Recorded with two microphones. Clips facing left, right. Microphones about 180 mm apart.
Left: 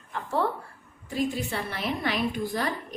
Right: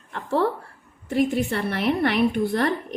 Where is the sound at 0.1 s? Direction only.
65° right (ahead or behind).